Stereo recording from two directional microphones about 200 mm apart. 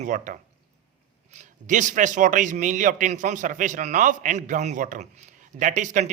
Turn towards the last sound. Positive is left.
turn(degrees=-35)  # may be behind; listen again after turning